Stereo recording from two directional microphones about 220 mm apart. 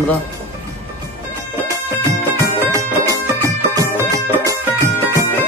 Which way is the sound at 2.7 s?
15° right (ahead or behind).